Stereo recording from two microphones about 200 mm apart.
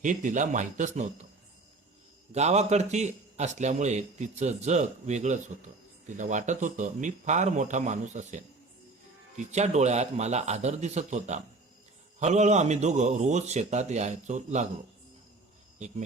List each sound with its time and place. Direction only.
0.0 s a man's voice: 40° right (ahead or behind)
2.3 s a man's voice: 35° right (ahead or behind)